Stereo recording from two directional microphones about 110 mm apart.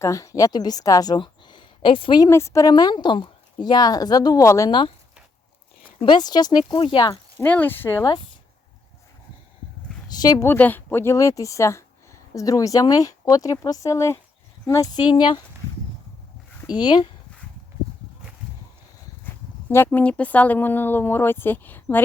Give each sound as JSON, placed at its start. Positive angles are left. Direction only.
{"t": 0.0, "sound": "a woman's voice", "side_deg": 30}
{"t": 2.2, "sound": "a woman's voice", "side_deg": 25}
{"t": 6.0, "sound": "a woman's voice", "side_deg": 45}
{"t": 6.8, "sound": "speech", "side_deg": 50}
{"t": 7.4, "sound": "speech", "side_deg": 15}
{"t": 10.1, "sound": "a sound", "side_deg": 35}
{"t": 10.4, "sound": "a woman's voice", "side_deg": 20}
{"t": 15.1, "sound": "speech", "side_deg": 45}
{"t": 16.7, "sound": "speech", "side_deg": 40}
{"t": 19.2, "sound": "speech", "side_deg": 20}